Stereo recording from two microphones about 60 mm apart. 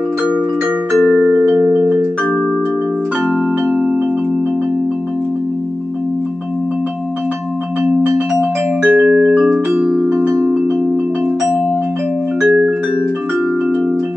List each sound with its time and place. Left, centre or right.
8.8 s music: right
9.5 s music: centre
12.4 s music: right